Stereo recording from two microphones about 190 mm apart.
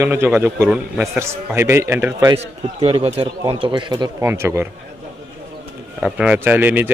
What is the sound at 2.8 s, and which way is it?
Speech, 30° right (ahead or behind).